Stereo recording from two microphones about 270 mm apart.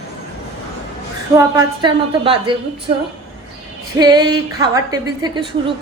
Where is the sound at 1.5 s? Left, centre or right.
Centre.